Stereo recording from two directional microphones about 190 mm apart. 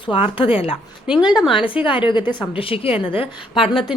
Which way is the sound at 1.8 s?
25° left (ahead or behind).